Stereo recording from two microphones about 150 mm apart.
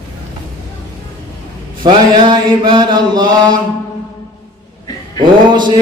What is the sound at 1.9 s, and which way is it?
Mantra, 30° right (ahead or behind).